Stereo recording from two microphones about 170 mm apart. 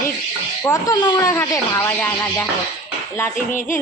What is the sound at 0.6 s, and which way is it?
Speech, 20° left (ahead or behind).